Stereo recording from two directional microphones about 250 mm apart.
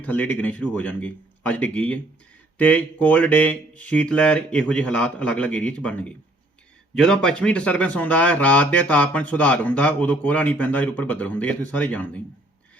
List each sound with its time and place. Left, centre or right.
0.0 s speech: centre